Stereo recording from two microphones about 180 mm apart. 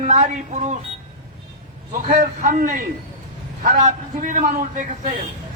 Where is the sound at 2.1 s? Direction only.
50° right (ahead or behind).